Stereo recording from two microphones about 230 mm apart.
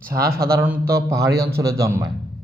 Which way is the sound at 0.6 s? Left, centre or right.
Centre.